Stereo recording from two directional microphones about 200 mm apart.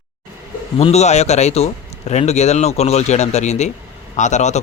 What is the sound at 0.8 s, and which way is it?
A man's voice, 30° left (ahead or behind).